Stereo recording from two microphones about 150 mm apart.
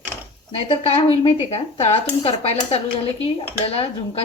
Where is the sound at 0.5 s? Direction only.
35° left (ahead or behind).